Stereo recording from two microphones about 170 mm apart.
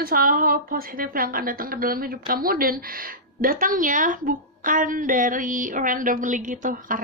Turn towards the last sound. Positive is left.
turn(degrees=-50)  # may be behind; listen again after turning